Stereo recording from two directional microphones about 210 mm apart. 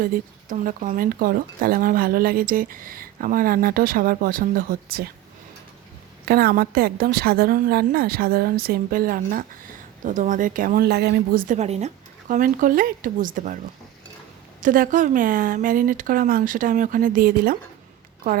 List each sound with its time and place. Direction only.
0.0 s speech: 40° right (ahead or behind)
6.2 s speech: 45° right (ahead or behind)
14.6 s speech: 40° right (ahead or behind)